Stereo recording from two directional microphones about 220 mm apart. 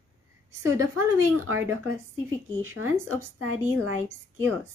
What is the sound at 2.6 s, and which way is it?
Speech, 70° right (ahead or behind).